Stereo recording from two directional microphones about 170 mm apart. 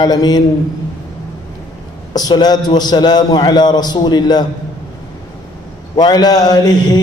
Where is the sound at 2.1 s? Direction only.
25° left (ahead or behind).